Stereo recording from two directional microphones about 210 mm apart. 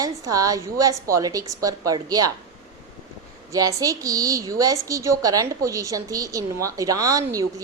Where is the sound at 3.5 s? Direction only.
15° right (ahead or behind).